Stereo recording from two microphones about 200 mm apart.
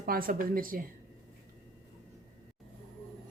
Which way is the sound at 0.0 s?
45° right (ahead or behind).